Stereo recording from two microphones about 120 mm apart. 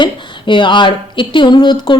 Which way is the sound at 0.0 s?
40° left (ahead or behind).